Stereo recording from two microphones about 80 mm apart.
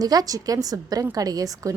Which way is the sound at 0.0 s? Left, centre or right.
Right.